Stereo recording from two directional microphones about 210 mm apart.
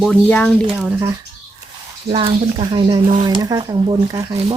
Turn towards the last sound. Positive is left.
turn(degrees=-15)  # may be behind; listen again after turning